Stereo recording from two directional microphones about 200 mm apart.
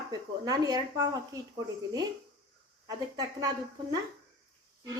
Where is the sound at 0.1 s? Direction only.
20° right (ahead or behind).